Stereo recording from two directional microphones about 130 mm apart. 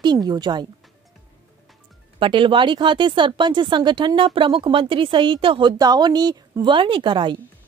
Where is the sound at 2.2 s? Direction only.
40° right (ahead or behind).